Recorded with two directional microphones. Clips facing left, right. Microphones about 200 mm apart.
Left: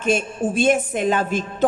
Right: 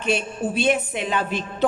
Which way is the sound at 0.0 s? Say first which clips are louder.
Left 3 dB; 45° left (ahead or behind).